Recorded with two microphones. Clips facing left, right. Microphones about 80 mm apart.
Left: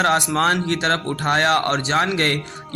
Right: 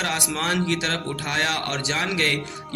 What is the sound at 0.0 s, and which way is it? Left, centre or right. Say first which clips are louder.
Speech: left 8 dB; left.